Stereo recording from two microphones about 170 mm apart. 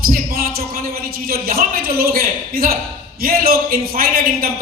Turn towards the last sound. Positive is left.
turn(degrees=-60)  # may be behind; listen again after turning